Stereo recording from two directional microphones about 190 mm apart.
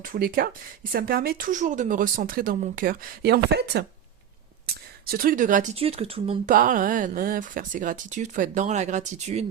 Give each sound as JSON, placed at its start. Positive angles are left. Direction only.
{"t": 0.0, "sound": "speech", "side_deg": -50}
{"t": 4.6, "sound": "a sound", "side_deg": -50}
{"t": 5.7, "sound": "speech", "side_deg": -30}
{"t": 6.5, "sound": "speech", "side_deg": -45}